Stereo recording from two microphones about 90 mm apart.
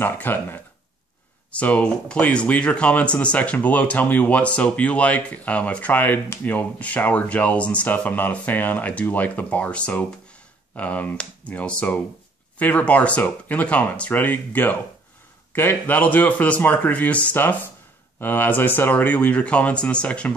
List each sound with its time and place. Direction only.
0.0 s speech: 20° left (ahead or behind)